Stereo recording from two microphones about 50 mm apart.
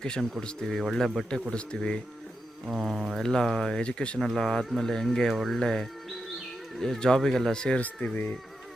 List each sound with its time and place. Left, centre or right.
0.0 s speech: centre
1.3 s speech: centre
3.2 s speech: centre
3.8 s speech: left
4.4 s speech: centre
5.3 s speech: centre
5.5 s speech: centre
8.1 s speech: left